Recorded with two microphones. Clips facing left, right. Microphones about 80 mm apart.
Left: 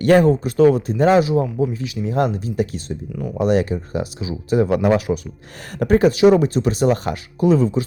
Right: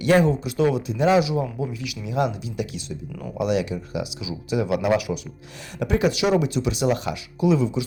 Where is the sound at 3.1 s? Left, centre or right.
Centre.